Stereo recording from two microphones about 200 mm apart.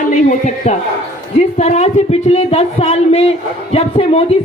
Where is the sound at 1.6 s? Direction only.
30° left (ahead or behind).